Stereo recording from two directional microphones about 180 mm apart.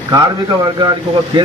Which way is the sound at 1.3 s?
25° right (ahead or behind).